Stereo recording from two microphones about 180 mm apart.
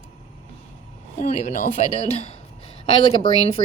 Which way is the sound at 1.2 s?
40° left (ahead or behind).